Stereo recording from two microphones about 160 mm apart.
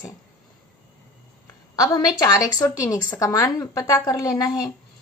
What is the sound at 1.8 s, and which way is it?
A woman's voice, 25° left (ahead or behind).